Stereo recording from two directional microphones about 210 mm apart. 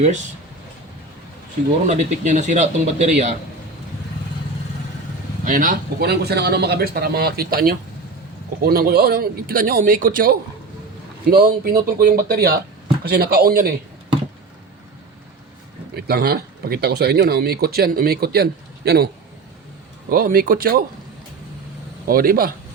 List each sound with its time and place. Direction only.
1.9 s speech: 35° right (ahead or behind)
5.5 s speech: 40° right (ahead or behind)
16.0 s speech: 50° right (ahead or behind)
20.1 s speech: 45° right (ahead or behind)
22.0 s speech: 45° right (ahead or behind)